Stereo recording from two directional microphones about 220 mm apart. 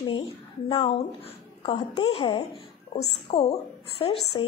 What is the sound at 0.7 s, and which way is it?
A woman's voice, 25° left (ahead or behind).